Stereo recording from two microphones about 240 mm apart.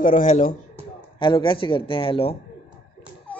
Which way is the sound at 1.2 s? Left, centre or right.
Left.